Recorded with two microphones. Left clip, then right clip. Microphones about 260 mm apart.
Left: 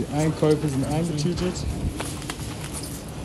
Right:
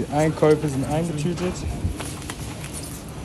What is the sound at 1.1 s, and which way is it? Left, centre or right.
Speech, right.